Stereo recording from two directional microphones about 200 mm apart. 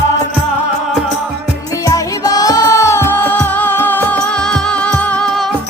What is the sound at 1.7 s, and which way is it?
Music, 15° left (ahead or behind).